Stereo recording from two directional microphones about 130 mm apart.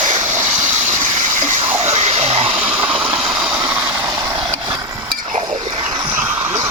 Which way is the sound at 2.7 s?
45° right (ahead or behind).